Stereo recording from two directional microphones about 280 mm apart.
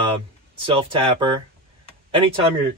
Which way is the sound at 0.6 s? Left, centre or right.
Centre.